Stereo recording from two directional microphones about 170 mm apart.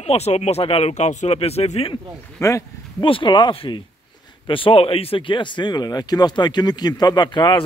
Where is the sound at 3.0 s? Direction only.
30° left (ahead or behind).